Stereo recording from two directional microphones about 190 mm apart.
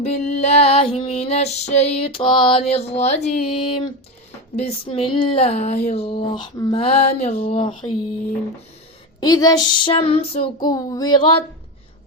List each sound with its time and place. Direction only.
0.0 s female singing: 35° left (ahead or behind)
9.2 s child singing: 20° left (ahead or behind)